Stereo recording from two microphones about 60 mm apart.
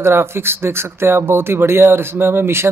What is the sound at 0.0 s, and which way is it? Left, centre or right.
Speech, right.